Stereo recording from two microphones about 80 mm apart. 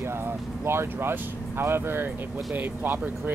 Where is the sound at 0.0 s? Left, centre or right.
Right.